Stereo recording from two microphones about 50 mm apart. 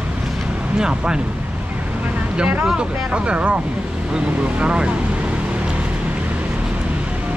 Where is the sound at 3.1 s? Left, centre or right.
Right.